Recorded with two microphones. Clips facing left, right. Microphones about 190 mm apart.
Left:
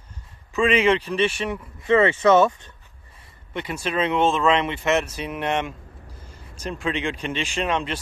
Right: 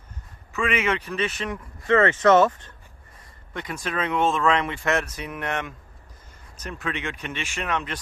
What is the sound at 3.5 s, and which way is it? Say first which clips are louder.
Speech: left 4 dB; 25° left (ahead or behind).